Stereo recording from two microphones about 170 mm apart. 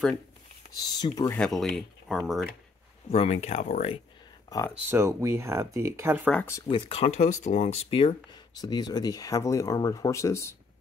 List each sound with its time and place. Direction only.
0.7 s speech: 25° left (ahead or behind)
1.3 s speech: 5° left (ahead or behind)
3.1 s speech: 40° left (ahead or behind)
4.5 s speech: 20° left (ahead or behind)
4.8 s speech: 15° right (ahead or behind)
6.2 s speech: 10° left (ahead or behind)
6.7 s speech: 35° left (ahead or behind); by 10.5 s 15° left (ahead or behind)